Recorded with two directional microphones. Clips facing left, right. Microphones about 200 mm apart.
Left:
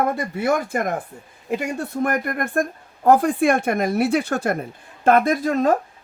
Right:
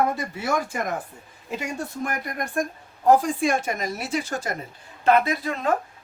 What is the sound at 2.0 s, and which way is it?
Speech, 60° left (ahead or behind).